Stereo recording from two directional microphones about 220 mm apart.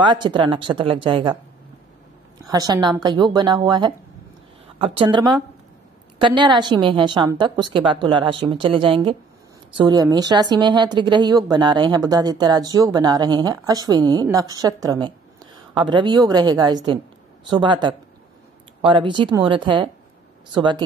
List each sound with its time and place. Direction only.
0.0 s a woman's voice: 20° right (ahead or behind)
2.4 s a woman's voice: 15° right (ahead or behind)